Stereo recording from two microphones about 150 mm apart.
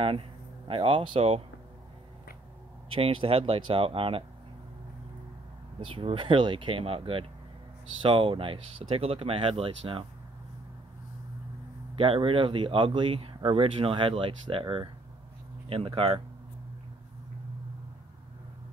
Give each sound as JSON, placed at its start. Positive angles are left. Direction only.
{"t": 0.7, "sound": "speech", "side_deg": -35}
{"t": 2.9, "sound": "speech", "side_deg": -35}
{"t": 5.8, "sound": "speech", "side_deg": -35}
{"t": 11.9, "sound": "speech", "side_deg": -35}